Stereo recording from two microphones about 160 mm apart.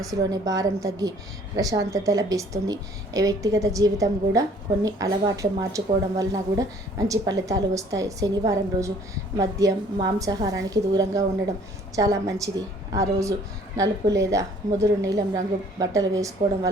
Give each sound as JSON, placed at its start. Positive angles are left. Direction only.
{"t": 0.0, "sound": "a woman's voice", "side_deg": -20}